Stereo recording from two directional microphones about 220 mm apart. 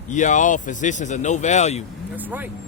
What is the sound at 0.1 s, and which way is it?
Speech, 35° left (ahead or behind).